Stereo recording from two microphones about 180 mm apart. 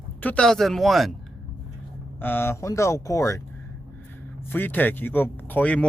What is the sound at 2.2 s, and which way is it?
Speech, 10° left (ahead or behind).